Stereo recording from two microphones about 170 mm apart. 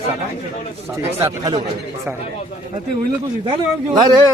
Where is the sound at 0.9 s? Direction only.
15° right (ahead or behind).